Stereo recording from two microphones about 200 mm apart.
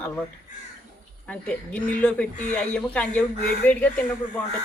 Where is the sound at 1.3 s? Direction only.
5° left (ahead or behind).